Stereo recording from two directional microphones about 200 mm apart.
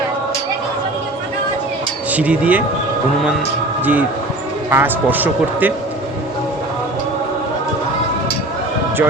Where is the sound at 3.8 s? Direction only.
10° right (ahead or behind).